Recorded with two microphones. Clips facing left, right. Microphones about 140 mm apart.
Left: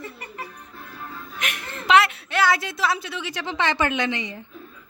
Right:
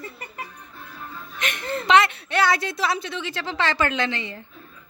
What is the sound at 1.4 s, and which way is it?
A woman's voice, 10° left (ahead or behind).